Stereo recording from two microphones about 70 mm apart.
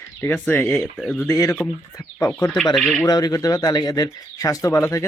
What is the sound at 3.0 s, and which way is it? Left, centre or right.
Speech, left.